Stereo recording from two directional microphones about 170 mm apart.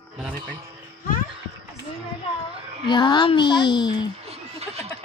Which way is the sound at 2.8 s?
25° left (ahead or behind).